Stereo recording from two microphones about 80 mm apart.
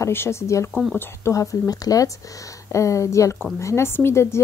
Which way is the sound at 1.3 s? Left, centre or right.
Left.